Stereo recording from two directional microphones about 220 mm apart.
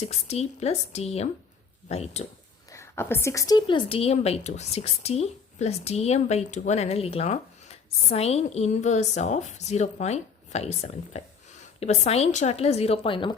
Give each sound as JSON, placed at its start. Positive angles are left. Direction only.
{"t": 0.0, "sound": "a woman's voice", "side_deg": 30}
{"t": 2.6, "sound": "a woman's voice", "side_deg": 10}